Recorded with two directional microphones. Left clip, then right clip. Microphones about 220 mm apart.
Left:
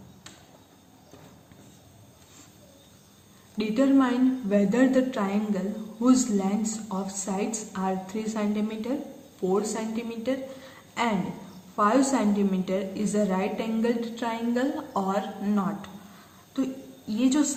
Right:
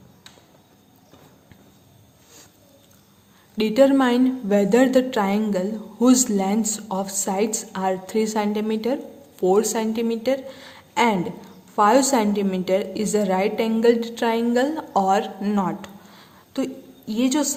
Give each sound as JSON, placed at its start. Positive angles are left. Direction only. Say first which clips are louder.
{"t": 3.6, "sound": "a woman's voice", "louder": "right 7 dB", "side_deg": -50}
{"t": 17.1, "sound": "a woman's voice", "louder": "right 3 dB", "side_deg": -50}